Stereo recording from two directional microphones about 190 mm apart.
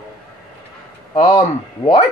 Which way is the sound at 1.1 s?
35° left (ahead or behind).